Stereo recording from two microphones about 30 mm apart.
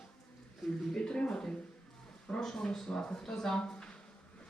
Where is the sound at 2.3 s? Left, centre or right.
Left.